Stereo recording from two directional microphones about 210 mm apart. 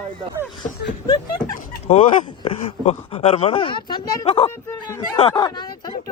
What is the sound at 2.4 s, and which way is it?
Speech, 30° left (ahead or behind).